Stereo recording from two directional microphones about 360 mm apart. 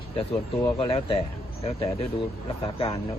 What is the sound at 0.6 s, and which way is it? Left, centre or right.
Speech, centre.